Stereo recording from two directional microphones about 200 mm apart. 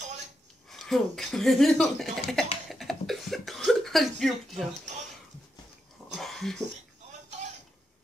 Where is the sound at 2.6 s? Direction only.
Centre (ahead or behind).